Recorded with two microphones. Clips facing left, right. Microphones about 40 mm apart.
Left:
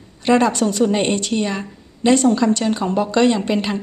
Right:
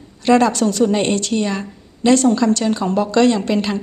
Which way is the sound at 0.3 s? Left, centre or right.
Centre.